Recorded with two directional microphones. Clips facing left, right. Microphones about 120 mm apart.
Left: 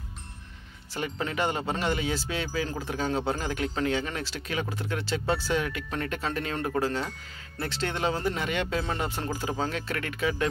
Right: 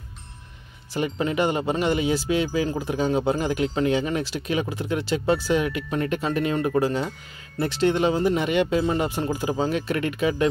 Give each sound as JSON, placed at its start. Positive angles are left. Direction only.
{"t": 0.9, "sound": "speech", "side_deg": -15}